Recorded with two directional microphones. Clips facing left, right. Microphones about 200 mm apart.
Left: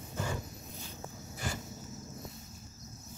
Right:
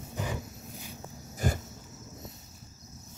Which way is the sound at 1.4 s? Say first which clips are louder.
Right 8 dB; 50° right (ahead or behind).